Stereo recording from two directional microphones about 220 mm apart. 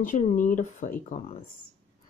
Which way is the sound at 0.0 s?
35° left (ahead or behind).